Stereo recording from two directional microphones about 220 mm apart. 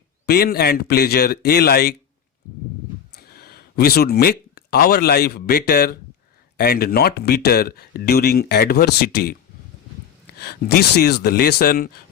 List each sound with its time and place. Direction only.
0.3 s speech: 45° left (ahead or behind)
3.2 s speech: 45° left (ahead or behind)